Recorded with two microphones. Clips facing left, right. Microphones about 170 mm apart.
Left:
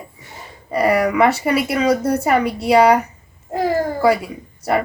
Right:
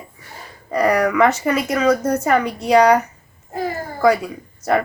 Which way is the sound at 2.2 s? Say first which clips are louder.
Left 1 dB; 10° left (ahead or behind).